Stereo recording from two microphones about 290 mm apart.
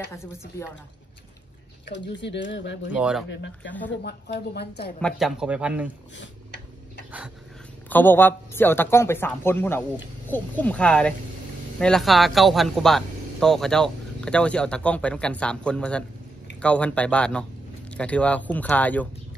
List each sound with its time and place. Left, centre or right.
1.9 s speech: left
2.9 s speech: centre
3.3 s speech: left
5.0 s speech: centre
7.9 s speech: centre